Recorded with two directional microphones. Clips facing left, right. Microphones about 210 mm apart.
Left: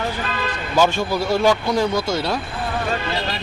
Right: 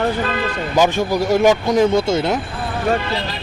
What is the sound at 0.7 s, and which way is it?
A man's voice, 15° right (ahead or behind).